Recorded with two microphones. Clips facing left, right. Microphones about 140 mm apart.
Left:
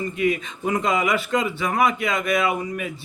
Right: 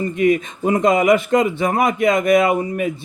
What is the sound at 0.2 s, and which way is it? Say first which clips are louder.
Speech: right 7 dB; 40° right (ahead or behind).